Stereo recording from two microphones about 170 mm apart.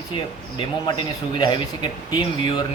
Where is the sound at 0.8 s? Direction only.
25° left (ahead or behind).